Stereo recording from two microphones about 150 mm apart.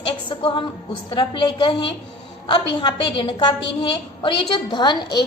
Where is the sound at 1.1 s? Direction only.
30° left (ahead or behind).